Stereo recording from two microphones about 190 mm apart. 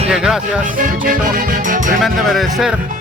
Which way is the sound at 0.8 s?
45° right (ahead or behind).